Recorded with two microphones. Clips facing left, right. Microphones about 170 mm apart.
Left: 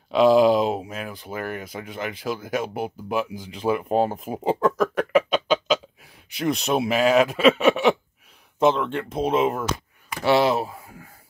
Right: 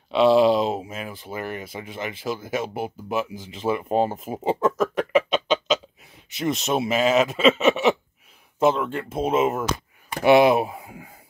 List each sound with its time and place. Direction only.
0.1 s speech: centre (ahead or behind)
10.2 s speech: 15° right (ahead or behind)